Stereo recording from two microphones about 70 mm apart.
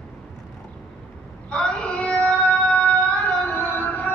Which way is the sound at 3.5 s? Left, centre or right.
Left.